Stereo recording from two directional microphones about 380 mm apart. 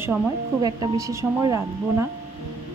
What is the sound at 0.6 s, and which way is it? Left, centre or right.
Speech, centre.